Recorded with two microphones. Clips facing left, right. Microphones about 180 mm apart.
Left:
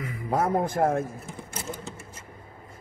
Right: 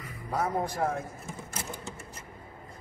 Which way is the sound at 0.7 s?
50° left (ahead or behind).